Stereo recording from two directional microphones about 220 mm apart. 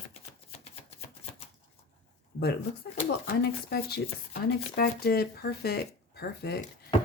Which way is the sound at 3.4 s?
45° left (ahead or behind).